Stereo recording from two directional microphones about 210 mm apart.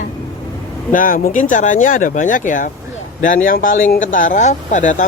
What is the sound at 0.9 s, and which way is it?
Speech, 40° left (ahead or behind).